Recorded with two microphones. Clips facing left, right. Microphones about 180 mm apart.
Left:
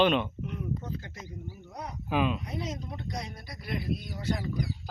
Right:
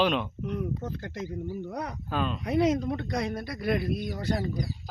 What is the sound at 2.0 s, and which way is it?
Speech, 10° left (ahead or behind).